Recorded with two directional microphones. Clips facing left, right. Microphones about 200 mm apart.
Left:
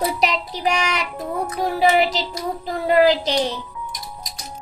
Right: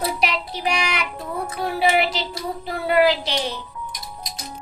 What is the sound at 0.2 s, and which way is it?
Child singing, 40° left (ahead or behind).